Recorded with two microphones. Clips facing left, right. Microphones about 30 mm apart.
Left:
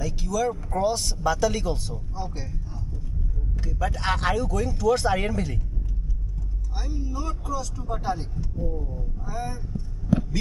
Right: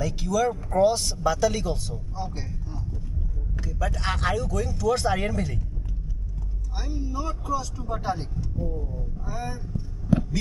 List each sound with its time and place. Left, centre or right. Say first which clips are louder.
0.0 s speech: right 2 dB; centre
3.6 s speech: left 2 dB; centre
6.7 s speech: right 1 dB; centre
8.4 s speech: even; centre